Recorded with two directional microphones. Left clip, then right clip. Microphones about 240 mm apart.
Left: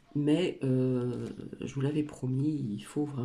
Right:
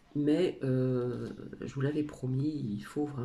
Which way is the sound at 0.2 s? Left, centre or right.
Centre.